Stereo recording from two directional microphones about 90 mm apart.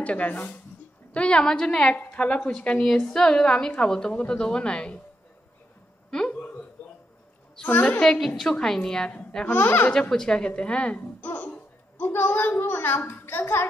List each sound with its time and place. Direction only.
0.0 s a woman's voice: 15° left (ahead or behind)
6.0 s a sound: 10° left (ahead or behind)
7.6 s a woman's voice: 15° left (ahead or behind)
9.9 s speech: 5° left (ahead or behind); by 13.7 s 25° left (ahead or behind)